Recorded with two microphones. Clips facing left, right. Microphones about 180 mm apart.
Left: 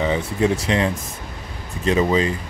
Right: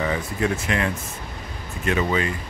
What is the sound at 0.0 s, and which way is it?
Speech, 20° left (ahead or behind).